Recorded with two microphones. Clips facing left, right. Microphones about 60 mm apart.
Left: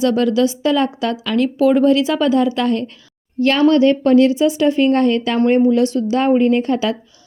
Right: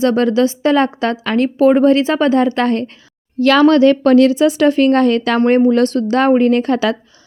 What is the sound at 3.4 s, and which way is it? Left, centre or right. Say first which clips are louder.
A woman's voice: right 3 dB; right.